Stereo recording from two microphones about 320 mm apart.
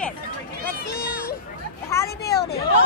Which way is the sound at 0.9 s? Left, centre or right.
Left.